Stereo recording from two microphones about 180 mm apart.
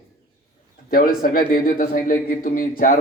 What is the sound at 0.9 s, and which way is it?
A man's voice, 50° left (ahead or behind).